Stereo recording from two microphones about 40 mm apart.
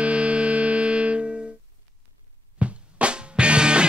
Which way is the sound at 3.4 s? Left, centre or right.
Right.